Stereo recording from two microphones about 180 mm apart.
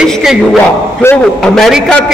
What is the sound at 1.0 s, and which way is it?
Speech, 15° left (ahead or behind).